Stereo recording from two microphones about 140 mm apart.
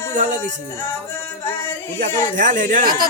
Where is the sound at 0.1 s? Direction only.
60° right (ahead or behind).